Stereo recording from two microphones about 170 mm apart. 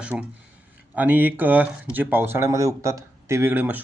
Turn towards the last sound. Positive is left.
turn(degrees=-10)  # may be behind; listen again after turning